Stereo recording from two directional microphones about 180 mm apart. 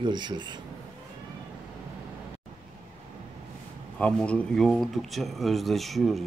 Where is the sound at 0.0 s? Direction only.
25° right (ahead or behind).